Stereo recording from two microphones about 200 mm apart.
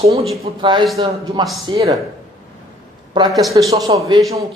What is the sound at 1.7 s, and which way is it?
Speech, 15° right (ahead or behind).